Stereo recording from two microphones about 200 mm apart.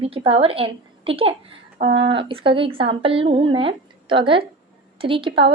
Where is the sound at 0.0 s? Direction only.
30° right (ahead or behind).